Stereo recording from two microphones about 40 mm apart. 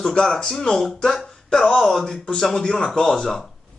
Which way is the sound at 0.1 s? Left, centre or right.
Centre.